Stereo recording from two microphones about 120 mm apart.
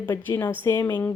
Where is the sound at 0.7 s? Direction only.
30° left (ahead or behind).